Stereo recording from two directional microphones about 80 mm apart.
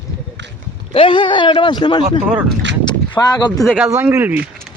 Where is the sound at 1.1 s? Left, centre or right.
Left.